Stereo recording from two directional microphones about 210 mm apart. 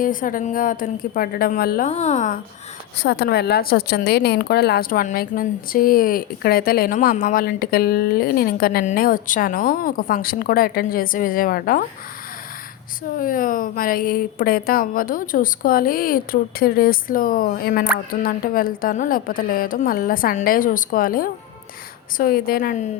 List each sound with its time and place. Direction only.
0.0 s a woman's voice: 40° left (ahead or behind)
1.9 s a woman's voice: 30° left (ahead or behind)
3.0 s speech: 50° left (ahead or behind)
13.1 s speech: 40° left (ahead or behind)